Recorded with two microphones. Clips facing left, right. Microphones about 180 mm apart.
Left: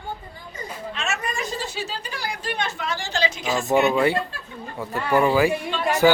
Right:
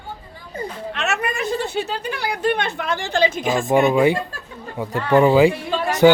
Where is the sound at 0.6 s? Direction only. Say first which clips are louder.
Right 6 dB; 65° right (ahead or behind).